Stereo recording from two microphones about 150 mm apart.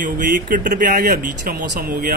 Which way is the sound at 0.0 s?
65° right (ahead or behind).